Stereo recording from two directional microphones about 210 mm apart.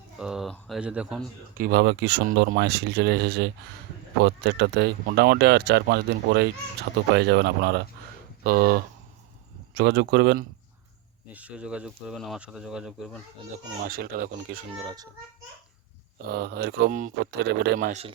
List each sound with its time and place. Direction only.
0.2 s a sound: 5° right (ahead or behind)
0.5 s speech: centre (ahead or behind)
1.5 s speech: 45° right (ahead or behind)
9.7 s speech: 55° right (ahead or behind)
11.3 s speech: 5° right (ahead or behind)
13.8 s speech: 45° right (ahead or behind)
14.8 s a child's voice: 20° right (ahead or behind)
16.3 s speech: 50° right (ahead or behind)
17.7 s speech: 35° right (ahead or behind)